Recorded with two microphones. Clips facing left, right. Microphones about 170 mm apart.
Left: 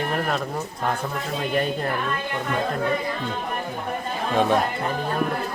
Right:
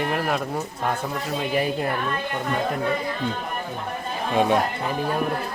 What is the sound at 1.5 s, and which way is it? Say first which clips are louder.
Speech: even; 5° right (ahead or behind).